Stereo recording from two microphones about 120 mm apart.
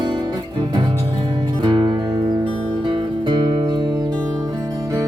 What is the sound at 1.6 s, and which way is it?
Music, 40° right (ahead or behind).